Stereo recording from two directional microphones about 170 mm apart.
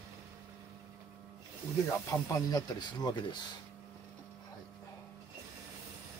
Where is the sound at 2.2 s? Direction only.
25° left (ahead or behind).